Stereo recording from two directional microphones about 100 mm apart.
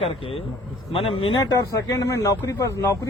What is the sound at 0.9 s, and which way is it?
Speech, 65° left (ahead or behind).